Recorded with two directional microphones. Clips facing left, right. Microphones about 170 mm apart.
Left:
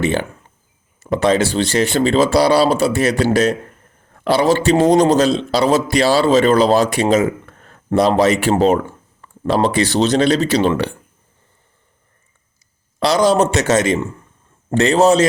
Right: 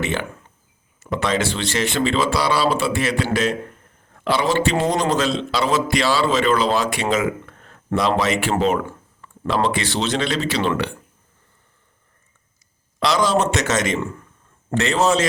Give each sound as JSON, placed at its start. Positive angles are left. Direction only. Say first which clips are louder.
{"t": 0.0, "sound": "a man's voice", "louder": "left 6 dB", "side_deg": 35}
{"t": 13.0, "sound": "a man's voice", "louder": "left 5 dB", "side_deg": 35}